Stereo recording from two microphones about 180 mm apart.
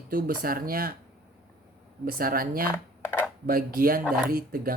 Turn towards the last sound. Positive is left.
turn(degrees=-55)  # may be behind; listen again after turning